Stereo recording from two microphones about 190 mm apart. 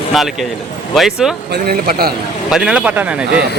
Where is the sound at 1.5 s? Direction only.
55° right (ahead or behind).